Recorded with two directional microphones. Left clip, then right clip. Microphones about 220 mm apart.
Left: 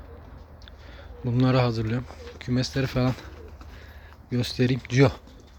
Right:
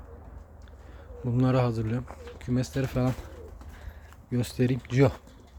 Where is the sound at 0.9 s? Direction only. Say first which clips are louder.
Left 2 dB; 5° right (ahead or behind).